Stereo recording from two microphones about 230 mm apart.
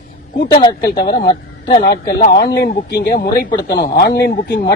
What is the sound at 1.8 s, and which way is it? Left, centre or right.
Speech, left.